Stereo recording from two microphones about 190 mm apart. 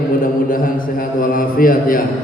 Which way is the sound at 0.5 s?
45° left (ahead or behind).